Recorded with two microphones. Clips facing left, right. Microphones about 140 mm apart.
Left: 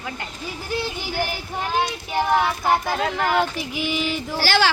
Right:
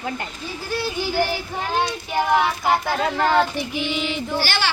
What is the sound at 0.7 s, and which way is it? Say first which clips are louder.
Speech: right 3 dB; 20° left (ahead or behind).